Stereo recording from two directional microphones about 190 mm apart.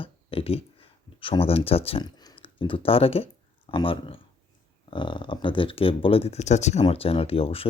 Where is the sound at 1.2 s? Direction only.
30° left (ahead or behind).